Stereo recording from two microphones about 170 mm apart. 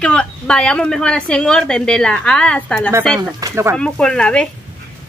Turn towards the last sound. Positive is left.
turn(degrees=5)  # may be behind; listen again after turning